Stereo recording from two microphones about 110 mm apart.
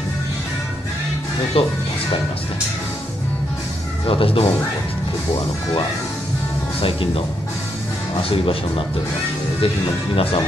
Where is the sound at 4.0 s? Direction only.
55° left (ahead or behind).